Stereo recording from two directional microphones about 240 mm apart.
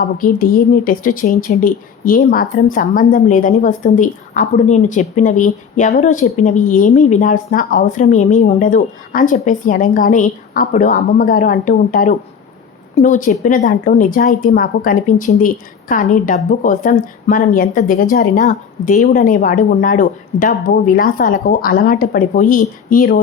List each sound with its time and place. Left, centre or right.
0.0 s a woman's voice: left